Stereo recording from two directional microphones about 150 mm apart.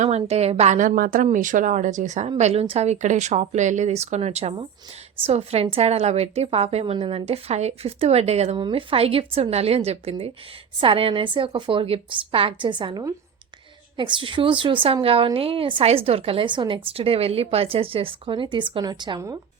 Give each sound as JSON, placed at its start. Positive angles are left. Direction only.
{"t": 0.2, "sound": "a woman's voice", "side_deg": -45}